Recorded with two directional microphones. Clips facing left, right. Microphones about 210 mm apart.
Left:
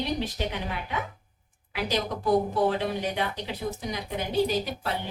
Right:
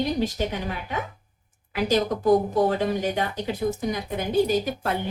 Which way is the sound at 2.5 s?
45° right (ahead or behind).